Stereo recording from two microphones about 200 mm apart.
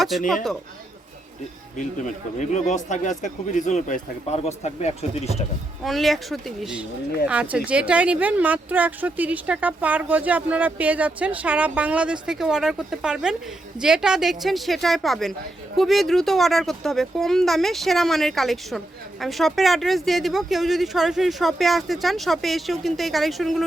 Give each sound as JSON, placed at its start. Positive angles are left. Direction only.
{"t": 0.1, "sound": "speech", "side_deg": 0}
{"t": 2.4, "sound": "speech", "side_deg": 35}
{"t": 5.8, "sound": "a woman's voice", "side_deg": 0}